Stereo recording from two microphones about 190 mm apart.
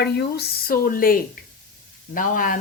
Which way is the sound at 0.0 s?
60° left (ahead or behind).